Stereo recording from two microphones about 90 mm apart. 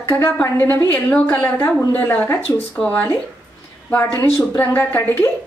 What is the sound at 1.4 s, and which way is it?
Speech, 35° left (ahead or behind).